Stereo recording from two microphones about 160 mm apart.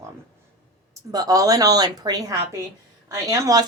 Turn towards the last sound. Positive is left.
turn(degrees=-20)  # may be behind; listen again after turning